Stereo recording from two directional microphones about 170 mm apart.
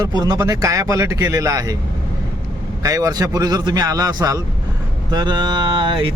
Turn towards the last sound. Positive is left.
turn(degrees=-30)  # may be behind; listen again after turning